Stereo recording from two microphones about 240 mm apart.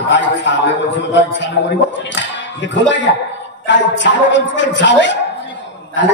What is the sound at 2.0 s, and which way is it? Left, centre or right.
Speech, left.